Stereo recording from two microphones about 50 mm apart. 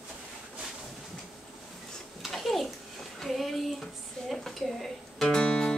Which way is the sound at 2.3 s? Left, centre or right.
Centre.